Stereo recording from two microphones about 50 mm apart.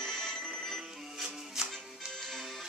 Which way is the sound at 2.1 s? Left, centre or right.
Centre.